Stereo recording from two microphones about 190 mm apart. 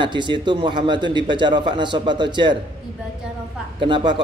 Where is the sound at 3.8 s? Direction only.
25° right (ahead or behind).